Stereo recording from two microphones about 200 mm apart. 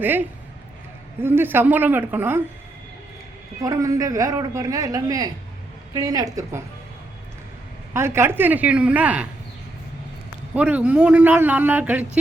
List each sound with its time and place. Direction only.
0.0 s speech: 10° right (ahead or behind)
3.6 s speech: 15° right (ahead or behind)
7.9 s speech: 10° right (ahead or behind)
10.5 s speech: 5° right (ahead or behind)